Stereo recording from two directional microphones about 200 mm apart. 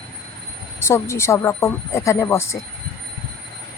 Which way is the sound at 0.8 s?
15° left (ahead or behind).